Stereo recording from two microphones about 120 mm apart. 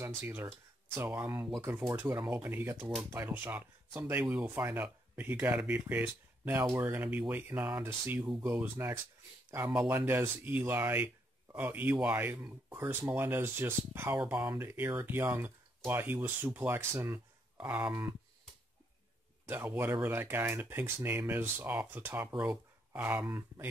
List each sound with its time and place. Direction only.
0.2 s speech: 15° right (ahead or behind)
1.6 s speech: 10° right (ahead or behind)
7.8 s speech: 20° right (ahead or behind)
19.4 s speech: 15° right (ahead or behind)